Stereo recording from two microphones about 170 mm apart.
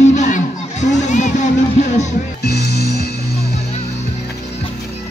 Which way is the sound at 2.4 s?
70° left (ahead or behind).